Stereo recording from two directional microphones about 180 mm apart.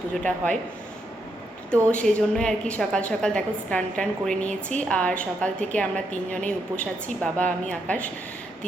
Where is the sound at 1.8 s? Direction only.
5° left (ahead or behind).